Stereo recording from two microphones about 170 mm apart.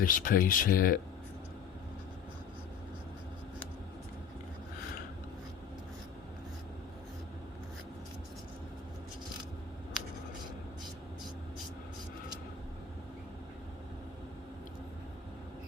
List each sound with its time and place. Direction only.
0.0 s speech: 55° left (ahead or behind)